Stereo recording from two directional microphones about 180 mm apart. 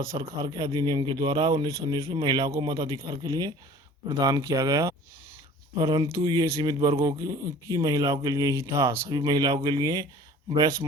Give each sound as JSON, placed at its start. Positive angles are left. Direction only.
{"t": 0.2, "sound": "speech", "side_deg": -25}